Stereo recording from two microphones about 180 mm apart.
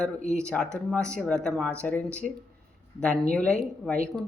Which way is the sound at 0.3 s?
5° left (ahead or behind).